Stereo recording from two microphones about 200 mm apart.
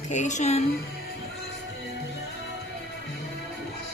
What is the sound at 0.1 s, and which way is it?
Speech, 35° left (ahead or behind).